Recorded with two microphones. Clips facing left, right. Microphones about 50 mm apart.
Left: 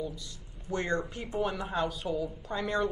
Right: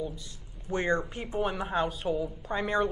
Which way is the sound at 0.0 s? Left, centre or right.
Right.